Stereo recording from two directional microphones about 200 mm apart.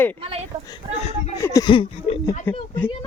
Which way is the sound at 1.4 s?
20° left (ahead or behind).